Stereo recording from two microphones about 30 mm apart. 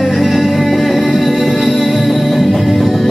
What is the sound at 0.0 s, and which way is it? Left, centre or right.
Music, centre.